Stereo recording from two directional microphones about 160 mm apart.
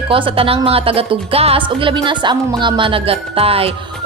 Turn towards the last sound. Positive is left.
turn(degrees=-35)  # may be behind; listen again after turning